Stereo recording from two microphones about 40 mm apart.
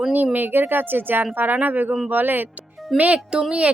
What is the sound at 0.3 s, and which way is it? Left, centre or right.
Speech, right.